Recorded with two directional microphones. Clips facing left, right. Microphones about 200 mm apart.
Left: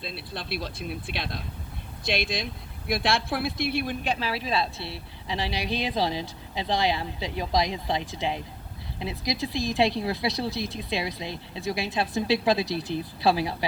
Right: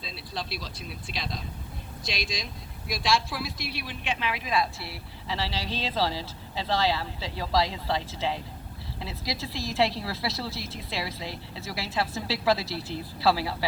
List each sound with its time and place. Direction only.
0.3 s speech: 55° left (ahead or behind)
4.0 s a woman's voice: 35° left (ahead or behind); by 13.7 s 20° left (ahead or behind)